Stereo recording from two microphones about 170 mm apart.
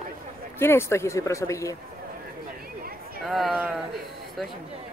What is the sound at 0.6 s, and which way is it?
Speech, 15° left (ahead or behind).